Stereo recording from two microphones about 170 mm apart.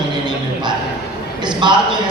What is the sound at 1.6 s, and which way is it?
Speech, 25° right (ahead or behind).